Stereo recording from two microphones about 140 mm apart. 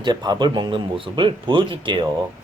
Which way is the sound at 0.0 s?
30° right (ahead or behind).